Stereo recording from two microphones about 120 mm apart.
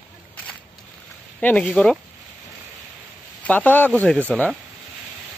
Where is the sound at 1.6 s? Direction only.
5° left (ahead or behind).